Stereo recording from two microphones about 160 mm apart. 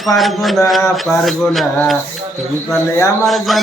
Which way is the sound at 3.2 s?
Centre (ahead or behind).